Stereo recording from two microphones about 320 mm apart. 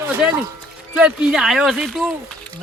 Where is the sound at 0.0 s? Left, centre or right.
Centre.